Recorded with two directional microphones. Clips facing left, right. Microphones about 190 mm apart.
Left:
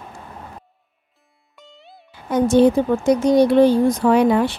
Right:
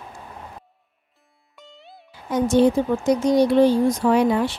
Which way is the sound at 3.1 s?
60° left (ahead or behind).